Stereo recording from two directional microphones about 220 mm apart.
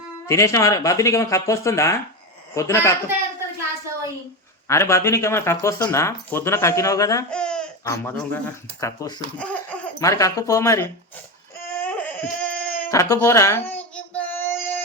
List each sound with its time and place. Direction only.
0.3 s speech: 15° left (ahead or behind)
4.7 s speech: 10° left (ahead or behind)
7.3 s babbling: 5° left (ahead or behind)
7.9 s speech: 5° left (ahead or behind)
8.8 s speech: 15° left (ahead or behind)
11.8 s baby cry: 5° left (ahead or behind)